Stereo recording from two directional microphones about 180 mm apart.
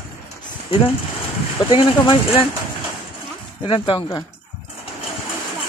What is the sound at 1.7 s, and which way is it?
Speech, 30° left (ahead or behind).